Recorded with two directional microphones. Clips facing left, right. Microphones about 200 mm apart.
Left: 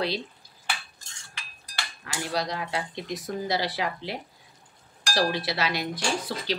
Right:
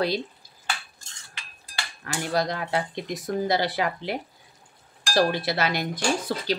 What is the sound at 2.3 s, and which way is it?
Cutlery, 50° right (ahead or behind).